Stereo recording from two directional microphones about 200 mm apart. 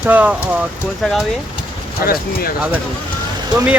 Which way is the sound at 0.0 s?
5° right (ahead or behind).